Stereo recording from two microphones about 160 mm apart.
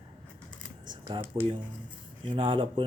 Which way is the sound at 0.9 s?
30° right (ahead or behind).